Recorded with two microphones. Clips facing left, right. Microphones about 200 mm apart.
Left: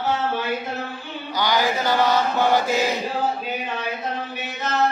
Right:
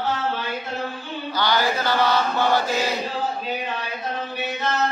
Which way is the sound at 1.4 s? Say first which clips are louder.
Left 1 dB; 15° left (ahead or behind).